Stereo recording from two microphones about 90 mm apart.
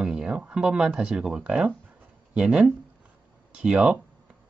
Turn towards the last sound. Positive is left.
turn(degrees=-10)  # may be behind; listen again after turning